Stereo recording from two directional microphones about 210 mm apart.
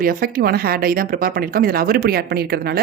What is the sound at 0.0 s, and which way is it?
Speech, 45° right (ahead or behind).